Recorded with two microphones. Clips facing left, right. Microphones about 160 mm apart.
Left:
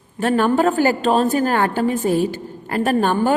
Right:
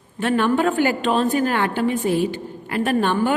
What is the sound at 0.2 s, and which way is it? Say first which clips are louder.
A woman's voice: left 2 dB; 40° left (ahead or behind).